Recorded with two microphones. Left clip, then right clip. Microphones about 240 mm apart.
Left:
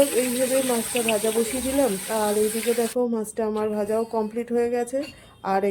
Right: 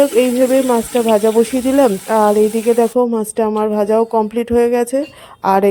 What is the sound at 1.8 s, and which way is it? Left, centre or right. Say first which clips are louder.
Speech: right 13 dB; right.